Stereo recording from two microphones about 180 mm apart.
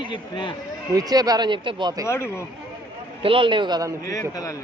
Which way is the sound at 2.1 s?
15° left (ahead or behind).